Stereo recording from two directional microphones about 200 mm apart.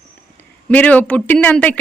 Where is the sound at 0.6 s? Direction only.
10° left (ahead or behind).